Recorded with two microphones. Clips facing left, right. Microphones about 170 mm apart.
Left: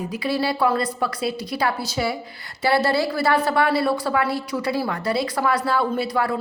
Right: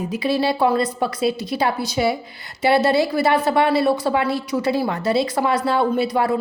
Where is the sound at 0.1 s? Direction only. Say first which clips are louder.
Right 4 dB; 20° right (ahead or behind).